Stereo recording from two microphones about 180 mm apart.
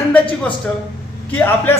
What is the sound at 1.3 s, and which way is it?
Speech, 10° left (ahead or behind).